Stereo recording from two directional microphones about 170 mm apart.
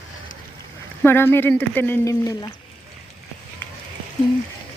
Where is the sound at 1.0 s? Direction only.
15° left (ahead or behind).